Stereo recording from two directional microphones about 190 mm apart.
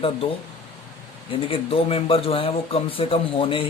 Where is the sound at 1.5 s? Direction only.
30° left (ahead or behind).